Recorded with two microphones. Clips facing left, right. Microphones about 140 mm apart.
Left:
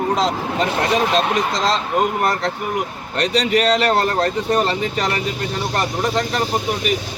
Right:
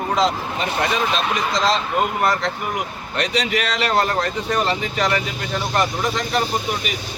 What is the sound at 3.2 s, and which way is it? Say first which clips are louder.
Speech: left 4 dB; 40° left (ahead or behind).